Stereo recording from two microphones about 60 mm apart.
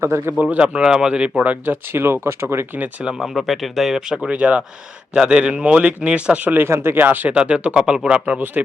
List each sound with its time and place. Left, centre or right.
0.0 s speech: right
0.5 s speech: centre
1.6 s speech: right
3.0 s speech: centre
4.3 s a man's voice: right
6.7 s speech: right
7.3 s a man's voice: centre